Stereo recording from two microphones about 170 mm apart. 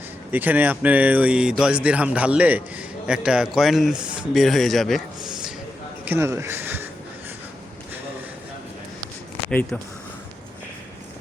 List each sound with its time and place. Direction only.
0.3 s speech: 10° right (ahead or behind)
6.1 s speech: 15° right (ahead or behind)